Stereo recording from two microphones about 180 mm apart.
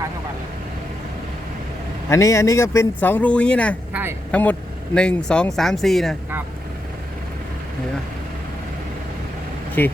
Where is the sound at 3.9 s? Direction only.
10° right (ahead or behind).